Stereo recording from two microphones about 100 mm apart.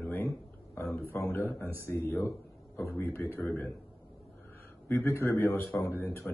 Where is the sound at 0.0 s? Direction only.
20° left (ahead or behind).